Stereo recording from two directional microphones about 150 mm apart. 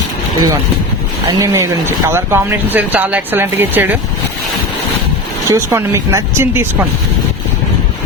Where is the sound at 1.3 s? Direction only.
20° right (ahead or behind).